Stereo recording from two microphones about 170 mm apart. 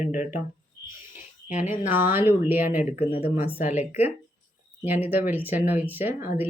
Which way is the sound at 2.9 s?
35° left (ahead or behind).